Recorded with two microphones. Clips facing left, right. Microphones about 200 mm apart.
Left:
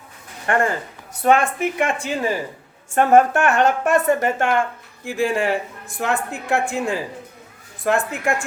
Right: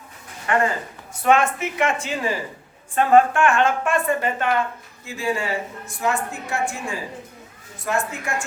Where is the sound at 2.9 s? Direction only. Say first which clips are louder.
Left 1 dB; 45° left (ahead or behind).